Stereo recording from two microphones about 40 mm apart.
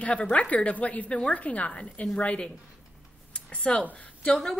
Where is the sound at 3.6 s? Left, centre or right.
Left.